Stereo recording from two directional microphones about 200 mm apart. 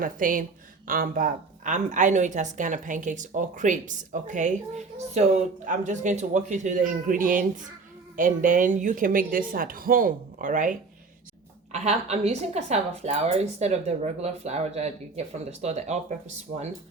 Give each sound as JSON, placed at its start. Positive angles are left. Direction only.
{"t": 0.0, "sound": "a woman's voice", "side_deg": -45}